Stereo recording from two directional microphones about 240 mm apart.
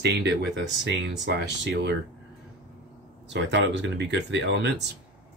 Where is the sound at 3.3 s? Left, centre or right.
Right.